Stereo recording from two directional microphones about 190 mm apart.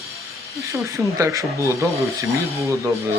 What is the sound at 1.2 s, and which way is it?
Speech, 15° right (ahead or behind).